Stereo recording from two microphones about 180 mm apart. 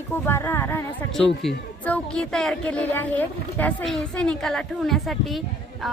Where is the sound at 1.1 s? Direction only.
Centre (ahead or behind).